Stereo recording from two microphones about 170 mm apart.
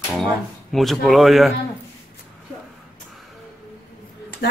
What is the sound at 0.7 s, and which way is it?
Speech, centre (ahead or behind).